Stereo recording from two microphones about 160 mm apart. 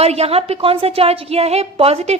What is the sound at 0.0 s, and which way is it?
A woman's voice, 40° right (ahead or behind).